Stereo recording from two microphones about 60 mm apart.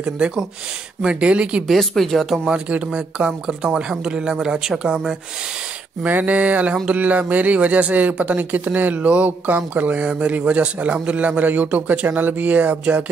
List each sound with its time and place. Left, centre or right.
1.0 s speech: centre
1.7 s speech: centre
2.5 s speech: centre
6.0 s speech: right